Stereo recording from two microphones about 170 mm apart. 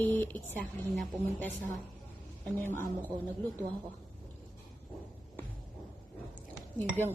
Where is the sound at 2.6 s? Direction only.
15° left (ahead or behind).